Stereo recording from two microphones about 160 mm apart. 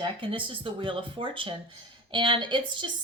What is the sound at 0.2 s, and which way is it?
A woman's voice, 35° right (ahead or behind).